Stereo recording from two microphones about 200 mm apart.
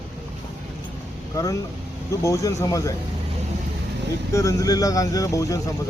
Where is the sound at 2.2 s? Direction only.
15° left (ahead or behind).